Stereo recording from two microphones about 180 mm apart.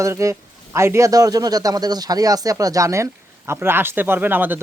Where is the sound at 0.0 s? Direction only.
15° right (ahead or behind).